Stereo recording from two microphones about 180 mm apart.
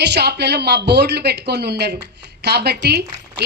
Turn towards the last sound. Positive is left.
turn(degrees=-65)  # may be behind; listen again after turning